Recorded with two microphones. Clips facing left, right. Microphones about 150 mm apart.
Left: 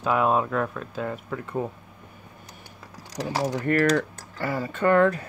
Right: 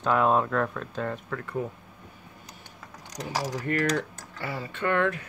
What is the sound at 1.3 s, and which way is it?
Speech, 20° left (ahead or behind).